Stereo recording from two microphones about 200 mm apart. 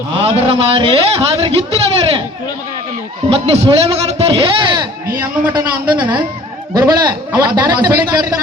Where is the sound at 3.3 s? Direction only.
30° right (ahead or behind).